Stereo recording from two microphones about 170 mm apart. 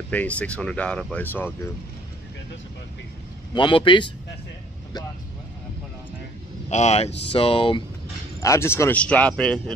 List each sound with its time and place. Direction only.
0.1 s speech: 10° left (ahead or behind)
3.5 s speech: 30° left (ahead or behind)
6.7 s speech: 40° left (ahead or behind)
8.4 s speech: 15° left (ahead or behind)